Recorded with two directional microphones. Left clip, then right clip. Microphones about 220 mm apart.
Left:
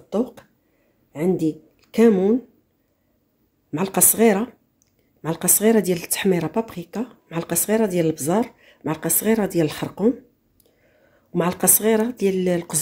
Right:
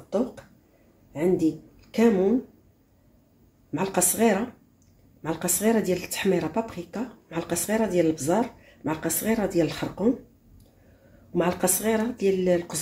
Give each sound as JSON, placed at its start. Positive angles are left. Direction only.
{"t": 0.1, "sound": "speech", "side_deg": 50}
{"t": 3.7, "sound": "speech", "side_deg": 50}
{"t": 11.3, "sound": "speech", "side_deg": 50}